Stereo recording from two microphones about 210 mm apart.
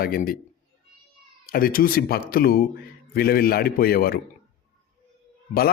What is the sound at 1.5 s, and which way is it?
Speech, 45° left (ahead or behind).